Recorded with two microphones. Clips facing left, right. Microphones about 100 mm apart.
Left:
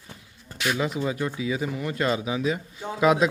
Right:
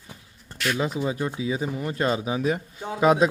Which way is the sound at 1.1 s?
25° right (ahead or behind).